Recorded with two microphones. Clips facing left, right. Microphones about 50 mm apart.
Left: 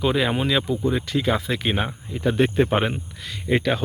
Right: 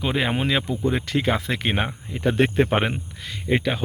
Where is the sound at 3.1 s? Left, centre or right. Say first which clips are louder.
Even; right.